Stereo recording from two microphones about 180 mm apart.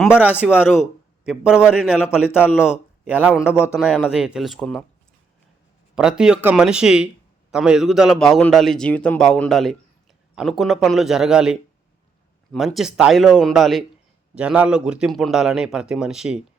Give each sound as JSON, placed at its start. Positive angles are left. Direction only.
{"t": 0.0, "sound": "a man's voice", "side_deg": -5}
{"t": 3.4, "sound": "a man's voice", "side_deg": 15}
{"t": 3.8, "sound": "a man's voice", "side_deg": -5}
{"t": 5.9, "sound": "a man's voice", "side_deg": -5}